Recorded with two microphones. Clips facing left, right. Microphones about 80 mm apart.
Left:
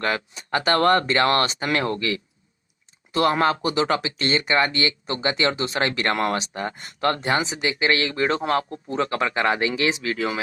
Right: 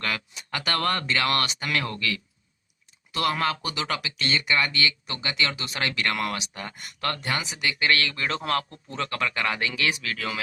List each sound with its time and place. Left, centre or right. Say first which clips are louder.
0.0 s speech: left 6 dB; left